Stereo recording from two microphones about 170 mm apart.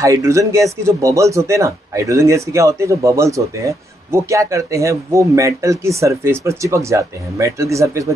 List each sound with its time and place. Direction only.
0.0 s speech: 20° right (ahead or behind)